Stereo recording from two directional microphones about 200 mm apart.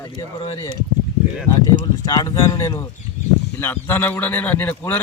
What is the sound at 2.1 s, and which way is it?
A man's voice, 15° left (ahead or behind).